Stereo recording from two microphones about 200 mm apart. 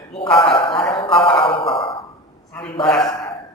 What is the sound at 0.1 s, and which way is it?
A man's voice, 25° left (ahead or behind).